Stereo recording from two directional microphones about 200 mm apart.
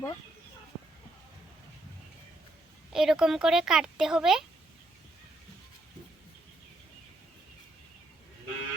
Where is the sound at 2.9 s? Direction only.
Centre (ahead or behind).